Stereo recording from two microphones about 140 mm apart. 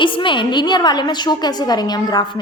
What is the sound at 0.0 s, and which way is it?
A woman's voice, 35° left (ahead or behind).